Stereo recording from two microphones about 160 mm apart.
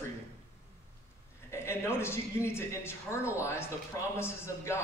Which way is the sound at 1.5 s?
15° left (ahead or behind).